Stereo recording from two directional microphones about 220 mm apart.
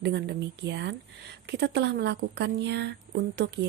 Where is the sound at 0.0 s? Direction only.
50° right (ahead or behind).